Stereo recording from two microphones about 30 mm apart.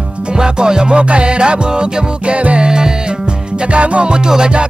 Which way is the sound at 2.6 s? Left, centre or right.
Right.